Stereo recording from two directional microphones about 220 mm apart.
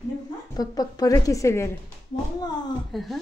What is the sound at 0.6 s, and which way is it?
A woman's voice, 15° left (ahead or behind).